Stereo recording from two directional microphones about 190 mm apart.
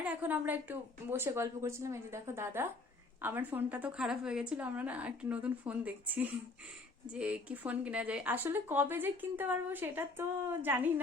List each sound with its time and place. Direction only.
0.0 s speech: 10° right (ahead or behind)